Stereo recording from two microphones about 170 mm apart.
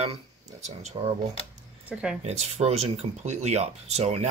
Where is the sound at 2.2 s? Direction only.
40° right (ahead or behind).